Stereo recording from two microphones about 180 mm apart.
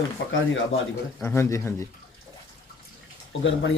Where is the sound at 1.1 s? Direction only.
15° left (ahead or behind).